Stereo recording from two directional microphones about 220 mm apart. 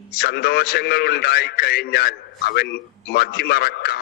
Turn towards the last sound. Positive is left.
turn(degrees=45)  # may be behind; listen again after turning